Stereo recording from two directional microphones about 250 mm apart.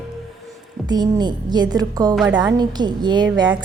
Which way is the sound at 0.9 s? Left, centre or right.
Centre.